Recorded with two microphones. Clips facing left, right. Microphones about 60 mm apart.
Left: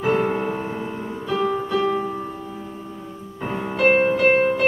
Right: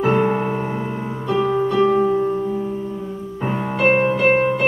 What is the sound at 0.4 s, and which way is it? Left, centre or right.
Music, centre.